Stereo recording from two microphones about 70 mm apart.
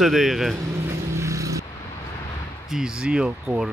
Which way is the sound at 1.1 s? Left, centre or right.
Right.